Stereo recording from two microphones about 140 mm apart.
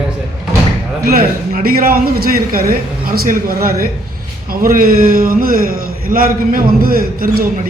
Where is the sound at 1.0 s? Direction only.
90° right.